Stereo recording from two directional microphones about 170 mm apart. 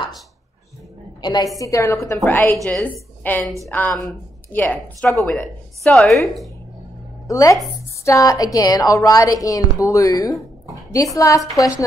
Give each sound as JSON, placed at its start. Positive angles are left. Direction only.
{"t": 1.2, "sound": "a woman's voice", "side_deg": 25}
{"t": 7.2, "sound": "a woman's voice", "side_deg": 20}